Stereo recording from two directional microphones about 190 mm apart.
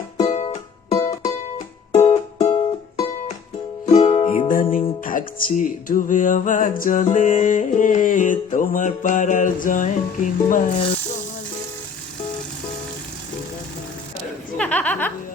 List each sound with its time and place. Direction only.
0.2 s music: 35° left (ahead or behind)
3.9 s music: 35° left (ahead or behind)
14.6 s music: 10° left (ahead or behind)